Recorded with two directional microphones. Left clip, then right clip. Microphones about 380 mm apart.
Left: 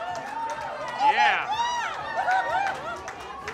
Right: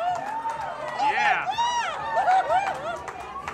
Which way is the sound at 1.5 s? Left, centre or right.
Centre.